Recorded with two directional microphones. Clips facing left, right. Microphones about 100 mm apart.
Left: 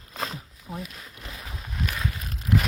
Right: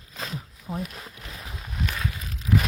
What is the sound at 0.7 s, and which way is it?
Speech, 25° right (ahead or behind).